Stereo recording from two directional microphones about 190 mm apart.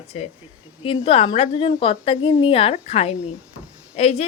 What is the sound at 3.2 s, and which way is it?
Speech, 5° right (ahead or behind).